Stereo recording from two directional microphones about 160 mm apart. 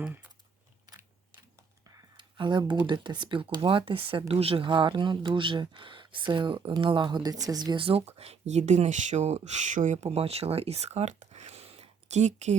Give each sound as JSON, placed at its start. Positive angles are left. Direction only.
{"t": 0.0, "sound": "speech", "side_deg": -10}
{"t": 1.9, "sound": "a sound", "side_deg": -25}
{"t": 2.8, "sound": "speech", "side_deg": -30}